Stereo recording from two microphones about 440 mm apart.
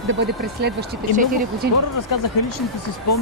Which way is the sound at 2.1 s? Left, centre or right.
Left.